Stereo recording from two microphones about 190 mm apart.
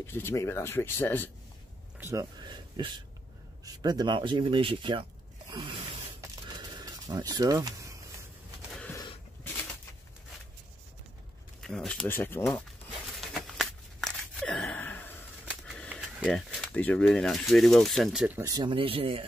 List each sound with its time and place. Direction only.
0.0 s speech: 15° left (ahead or behind)
2.0 s speech: 15° right (ahead or behind)
5.5 s spray: 25° right (ahead or behind)
6.5 s a sound: 20° right (ahead or behind)
11.6 s speech: centre (ahead or behind)
13.3 s a sound: centre (ahead or behind)
15.9 s speech: 5° right (ahead or behind)
18.4 s speech: 25° right (ahead or behind)